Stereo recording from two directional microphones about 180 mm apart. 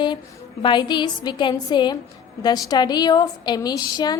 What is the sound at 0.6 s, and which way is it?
A woman's voice, 25° left (ahead or behind).